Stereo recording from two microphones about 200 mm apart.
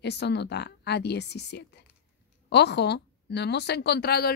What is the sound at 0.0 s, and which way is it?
A woman's voice, 55° left (ahead or behind).